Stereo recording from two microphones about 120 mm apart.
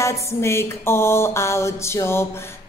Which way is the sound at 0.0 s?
25° left (ahead or behind).